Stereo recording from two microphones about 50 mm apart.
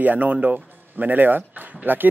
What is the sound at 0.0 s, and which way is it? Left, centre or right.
A man's voice, right.